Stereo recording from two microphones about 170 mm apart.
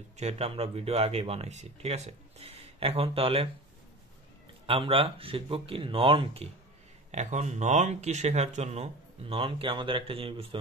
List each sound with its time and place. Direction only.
0.2 s speech: 35° right (ahead or behind)
4.6 s speech: 35° right (ahead or behind)